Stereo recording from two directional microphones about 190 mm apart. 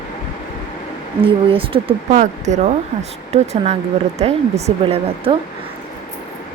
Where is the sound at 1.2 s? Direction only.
30° right (ahead or behind).